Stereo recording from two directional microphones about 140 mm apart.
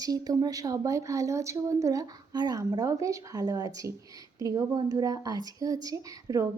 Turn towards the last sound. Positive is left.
turn(degrees=-25)  # may be behind; listen again after turning